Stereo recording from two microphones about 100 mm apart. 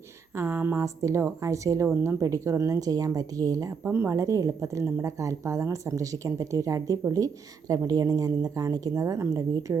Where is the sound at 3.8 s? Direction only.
20° right (ahead or behind).